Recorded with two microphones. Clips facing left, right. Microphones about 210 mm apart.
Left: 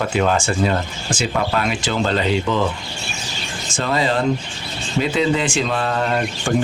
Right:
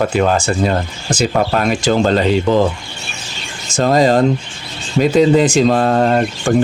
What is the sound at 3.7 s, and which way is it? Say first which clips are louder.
Speech: right 8 dB; 40° right (ahead or behind).